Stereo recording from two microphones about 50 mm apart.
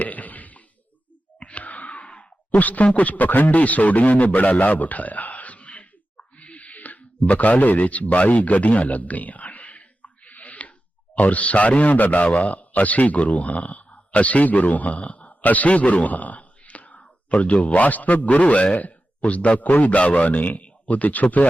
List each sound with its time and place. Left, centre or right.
0.0 s a sound: left
1.4 s sigh: left
11.1 s speech: left